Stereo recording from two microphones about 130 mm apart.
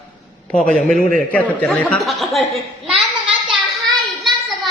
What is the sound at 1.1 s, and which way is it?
A child's voice, 10° left (ahead or behind).